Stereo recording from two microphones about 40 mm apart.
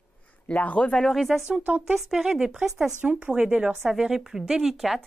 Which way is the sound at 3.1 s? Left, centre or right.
Right.